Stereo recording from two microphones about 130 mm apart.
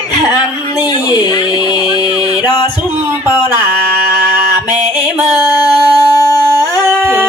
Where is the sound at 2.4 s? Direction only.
35° left (ahead or behind).